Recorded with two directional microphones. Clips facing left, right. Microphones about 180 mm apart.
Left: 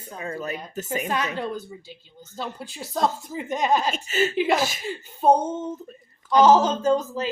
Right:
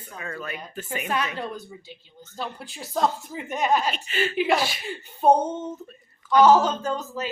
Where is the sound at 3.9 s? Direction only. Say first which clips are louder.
Left 3 dB; 45° left (ahead or behind).